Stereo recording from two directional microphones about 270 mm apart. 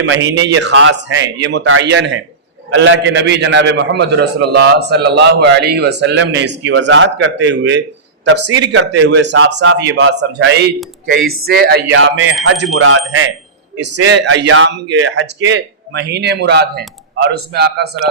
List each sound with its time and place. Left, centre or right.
0.0 s a man's voice: right
13.7 s a man's voice: right